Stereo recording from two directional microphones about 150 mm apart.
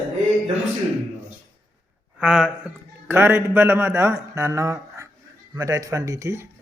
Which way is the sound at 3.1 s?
15° right (ahead or behind).